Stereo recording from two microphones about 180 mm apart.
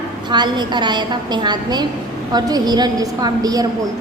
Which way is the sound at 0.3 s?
25° right (ahead or behind).